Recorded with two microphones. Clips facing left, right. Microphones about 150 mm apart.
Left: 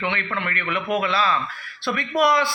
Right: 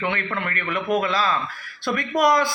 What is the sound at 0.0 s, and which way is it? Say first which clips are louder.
A man's voice: right 1 dB; 40° right (ahead or behind).